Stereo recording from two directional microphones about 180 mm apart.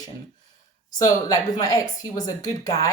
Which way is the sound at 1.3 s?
20° left (ahead or behind).